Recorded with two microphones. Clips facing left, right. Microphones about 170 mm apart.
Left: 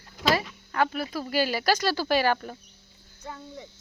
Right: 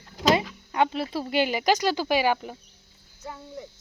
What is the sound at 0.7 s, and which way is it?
Speech, 25° right (ahead or behind).